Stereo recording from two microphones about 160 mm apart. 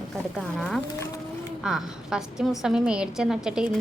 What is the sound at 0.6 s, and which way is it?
A woman's voice, centre (ahead or behind).